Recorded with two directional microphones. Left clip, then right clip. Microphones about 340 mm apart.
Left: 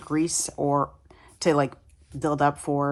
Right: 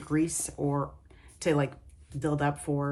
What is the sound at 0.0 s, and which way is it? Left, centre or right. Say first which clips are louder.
Speech: left 4 dB; centre.